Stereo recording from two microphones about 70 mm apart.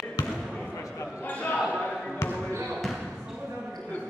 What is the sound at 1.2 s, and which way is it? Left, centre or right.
Basketball bounce, left.